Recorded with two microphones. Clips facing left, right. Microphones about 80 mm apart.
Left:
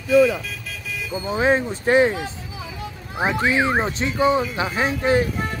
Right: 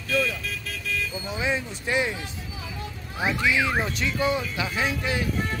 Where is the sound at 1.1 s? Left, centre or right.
Left.